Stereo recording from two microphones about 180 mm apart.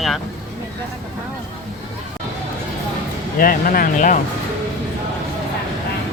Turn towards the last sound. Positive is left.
turn(degrees=45)  # may be behind; listen again after turning